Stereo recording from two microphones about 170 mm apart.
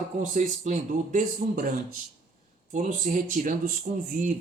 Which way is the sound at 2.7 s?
50° right (ahead or behind).